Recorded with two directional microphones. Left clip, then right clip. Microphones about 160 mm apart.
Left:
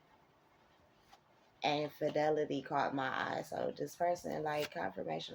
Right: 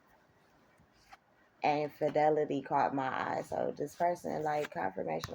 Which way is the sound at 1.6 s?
40° right (ahead or behind).